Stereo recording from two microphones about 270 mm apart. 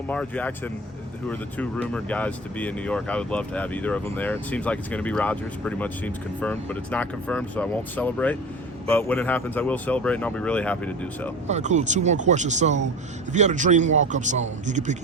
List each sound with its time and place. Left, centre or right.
0.1 s speech: centre
11.4 s a man's voice: right